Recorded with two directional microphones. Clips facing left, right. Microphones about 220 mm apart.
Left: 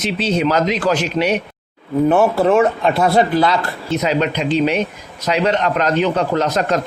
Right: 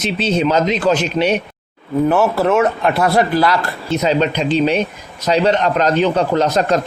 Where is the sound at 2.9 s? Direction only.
25° left (ahead or behind).